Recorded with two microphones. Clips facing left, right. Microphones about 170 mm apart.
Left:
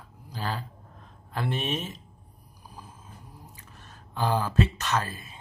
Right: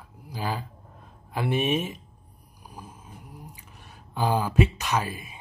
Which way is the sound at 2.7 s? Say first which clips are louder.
Right 3 dB; 15° right (ahead or behind).